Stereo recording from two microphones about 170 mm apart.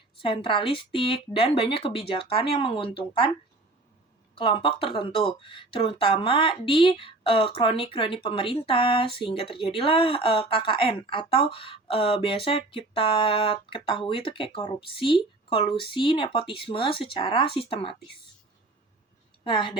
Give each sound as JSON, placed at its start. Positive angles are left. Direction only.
{"t": 0.2, "sound": "speech", "side_deg": 30}
{"t": 4.4, "sound": "speech", "side_deg": 30}
{"t": 19.5, "sound": "a woman's voice", "side_deg": 25}